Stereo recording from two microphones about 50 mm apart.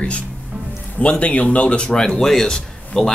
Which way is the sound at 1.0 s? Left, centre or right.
Left.